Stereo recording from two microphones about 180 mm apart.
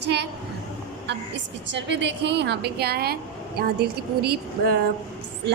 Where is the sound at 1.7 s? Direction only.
80° right.